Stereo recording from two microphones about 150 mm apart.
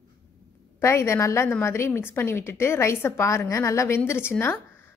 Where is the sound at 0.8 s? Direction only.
20° left (ahead or behind).